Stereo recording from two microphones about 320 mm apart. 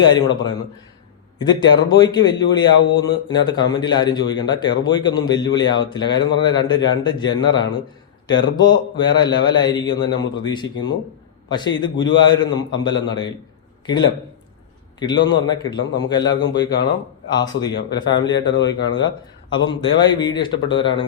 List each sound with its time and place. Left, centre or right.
0.0 s a man's voice: centre
1.9 s a man's voice: centre
15.4 s a man's voice: centre
18.3 s speech: left
18.7 s a man's voice: centre